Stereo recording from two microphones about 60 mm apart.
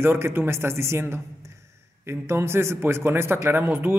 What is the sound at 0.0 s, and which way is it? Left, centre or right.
Speech, right.